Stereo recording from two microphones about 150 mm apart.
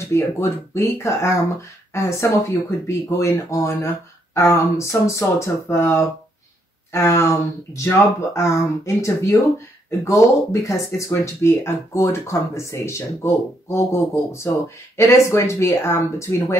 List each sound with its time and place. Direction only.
0.1 s speech: 20° left (ahead or behind)